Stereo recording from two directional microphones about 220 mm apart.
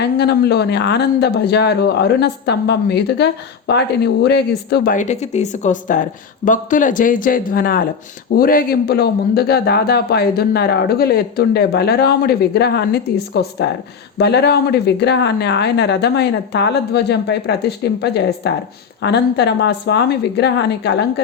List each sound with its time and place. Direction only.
0.0 s speech: 50° left (ahead or behind)
4.9 s speech: 30° left (ahead or behind); by 20.9 s 50° left (ahead or behind)